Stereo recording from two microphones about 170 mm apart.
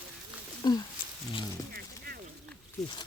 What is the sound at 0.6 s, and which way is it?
Speech, 25° left (ahead or behind).